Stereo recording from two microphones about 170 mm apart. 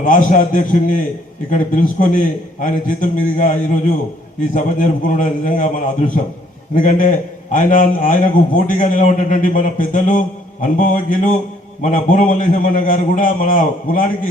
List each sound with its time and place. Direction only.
0.0 s a man's voice: 50° left (ahead or behind)